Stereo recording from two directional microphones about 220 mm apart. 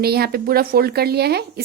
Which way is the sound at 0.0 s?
45° right (ahead or behind).